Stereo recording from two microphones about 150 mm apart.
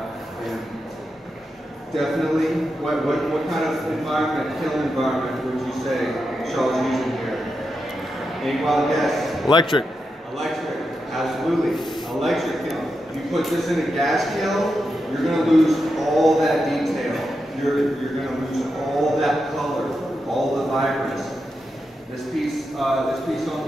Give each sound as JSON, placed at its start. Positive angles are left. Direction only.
{"t": 2.0, "sound": "a man's voice", "side_deg": 0}
{"t": 8.4, "sound": "a man's voice", "side_deg": 0}
{"t": 9.5, "sound": "speech", "side_deg": 30}
{"t": 11.1, "sound": "a sound", "side_deg": 0}
{"t": 13.3, "sound": "a man's voice", "side_deg": 0}
{"t": 19.1, "sound": "a man's voice", "side_deg": 0}
{"t": 20.3, "sound": "a sound", "side_deg": 0}
{"t": 22.8, "sound": "a man's voice", "side_deg": 0}